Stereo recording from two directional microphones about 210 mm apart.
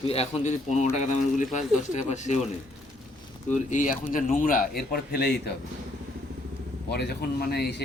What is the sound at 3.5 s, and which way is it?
A man's voice, 35° left (ahead or behind).